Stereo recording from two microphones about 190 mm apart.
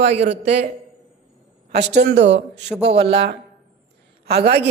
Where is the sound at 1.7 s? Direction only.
65° right (ahead or behind).